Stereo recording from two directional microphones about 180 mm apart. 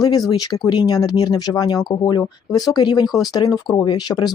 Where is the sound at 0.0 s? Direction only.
20° left (ahead or behind).